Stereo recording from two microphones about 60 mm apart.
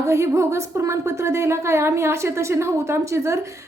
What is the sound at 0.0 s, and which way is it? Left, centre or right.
A woman's voice, right.